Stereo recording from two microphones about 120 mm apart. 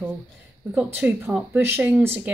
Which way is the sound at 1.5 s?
15° right (ahead or behind).